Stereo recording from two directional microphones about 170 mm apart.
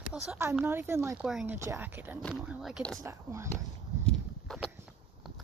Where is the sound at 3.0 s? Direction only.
15° right (ahead or behind).